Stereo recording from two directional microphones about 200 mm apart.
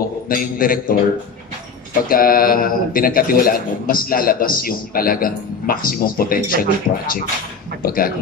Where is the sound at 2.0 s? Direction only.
45° left (ahead or behind).